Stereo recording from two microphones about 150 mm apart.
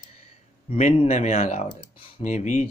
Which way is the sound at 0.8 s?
50° left (ahead or behind).